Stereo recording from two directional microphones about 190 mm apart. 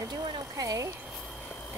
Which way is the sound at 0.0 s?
20° right (ahead or behind).